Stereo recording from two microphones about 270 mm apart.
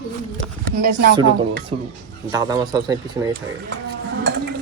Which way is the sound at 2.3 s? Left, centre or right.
Centre.